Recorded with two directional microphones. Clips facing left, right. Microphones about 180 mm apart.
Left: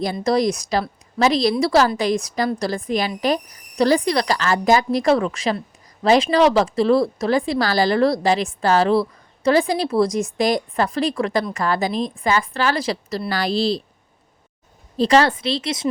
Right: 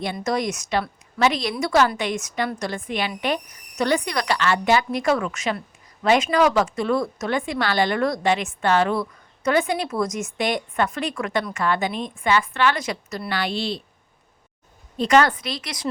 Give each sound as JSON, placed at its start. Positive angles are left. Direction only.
{"t": 0.0, "sound": "speech", "side_deg": 35}
{"t": 14.9, "sound": "a woman's voice", "side_deg": 30}